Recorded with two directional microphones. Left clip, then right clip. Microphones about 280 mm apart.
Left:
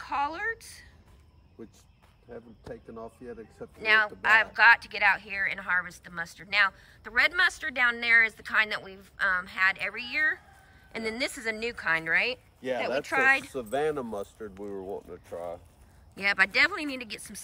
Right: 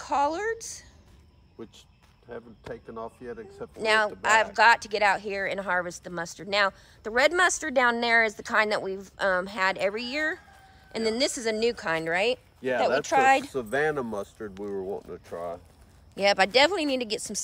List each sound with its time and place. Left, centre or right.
0.0 s a woman's voice: centre
2.2 s speech: centre
13.5 s speech: right
16.2 s speech: centre